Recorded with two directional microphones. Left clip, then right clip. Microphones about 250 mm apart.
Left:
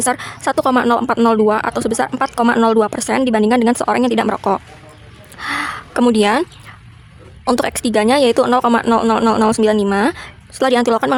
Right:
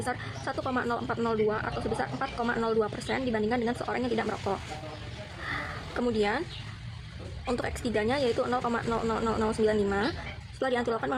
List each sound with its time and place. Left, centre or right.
0.0 s speech: left
5.4 s a sound: left
7.4 s speech: left